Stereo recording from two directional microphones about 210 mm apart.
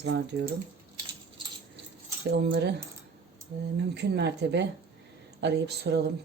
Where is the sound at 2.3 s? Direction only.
50° right (ahead or behind).